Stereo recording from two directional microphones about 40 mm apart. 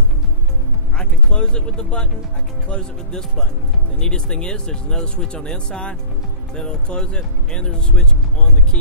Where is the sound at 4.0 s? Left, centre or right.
Centre.